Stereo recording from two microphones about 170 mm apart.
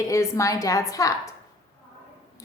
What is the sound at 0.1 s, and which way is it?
A woman's voice, 20° left (ahead or behind).